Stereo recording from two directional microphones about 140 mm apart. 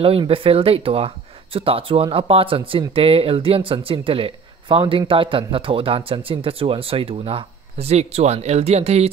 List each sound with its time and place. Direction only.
0.0 s speech: 40° right (ahead or behind)